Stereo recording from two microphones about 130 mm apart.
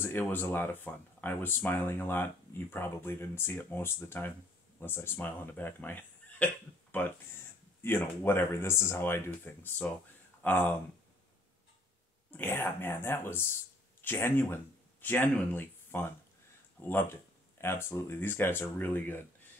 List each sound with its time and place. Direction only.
0.0 s speech: 15° left (ahead or behind)
12.3 s speech: 15° left (ahead or behind)